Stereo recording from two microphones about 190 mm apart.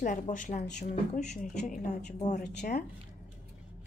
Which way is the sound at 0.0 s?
45° left (ahead or behind).